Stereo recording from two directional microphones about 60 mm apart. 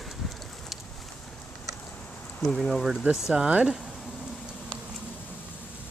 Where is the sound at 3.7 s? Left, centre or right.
Centre.